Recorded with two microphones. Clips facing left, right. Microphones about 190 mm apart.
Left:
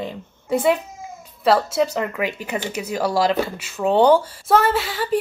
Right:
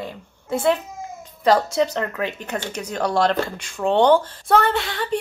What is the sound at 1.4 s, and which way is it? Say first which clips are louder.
Speech: even; 5° left (ahead or behind).